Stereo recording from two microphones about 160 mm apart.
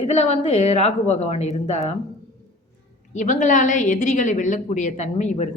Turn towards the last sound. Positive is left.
turn(degrees=45)  # may be behind; listen again after turning